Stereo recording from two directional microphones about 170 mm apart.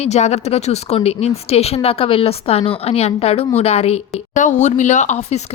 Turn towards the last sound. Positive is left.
turn(degrees=45)  # may be behind; listen again after turning